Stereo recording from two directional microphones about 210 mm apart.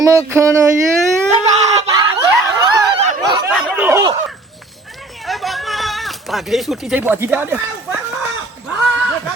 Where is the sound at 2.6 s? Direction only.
20° right (ahead or behind).